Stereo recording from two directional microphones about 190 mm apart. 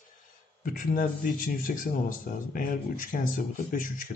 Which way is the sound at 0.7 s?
45° left (ahead or behind).